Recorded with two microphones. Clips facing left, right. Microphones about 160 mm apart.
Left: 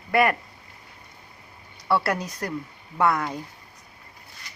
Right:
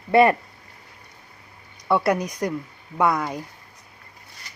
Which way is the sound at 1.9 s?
20° right (ahead or behind).